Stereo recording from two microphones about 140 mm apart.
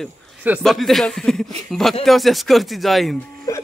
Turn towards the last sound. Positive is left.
turn(degrees=25)  # may be behind; listen again after turning